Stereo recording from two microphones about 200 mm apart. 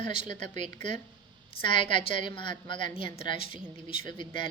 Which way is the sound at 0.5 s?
35° right (ahead or behind).